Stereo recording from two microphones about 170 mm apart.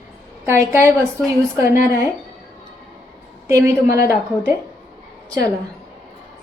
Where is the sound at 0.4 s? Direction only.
15° right (ahead or behind).